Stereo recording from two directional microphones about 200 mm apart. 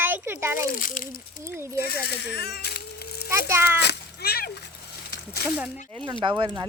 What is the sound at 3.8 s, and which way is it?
Speech, 50° left (ahead or behind).